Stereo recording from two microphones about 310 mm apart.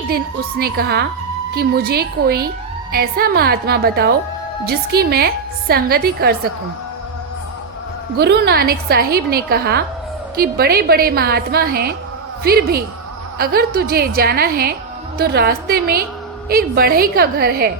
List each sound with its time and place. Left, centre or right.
0.3 s a woman's voice: right
8.1 s a woman's voice: right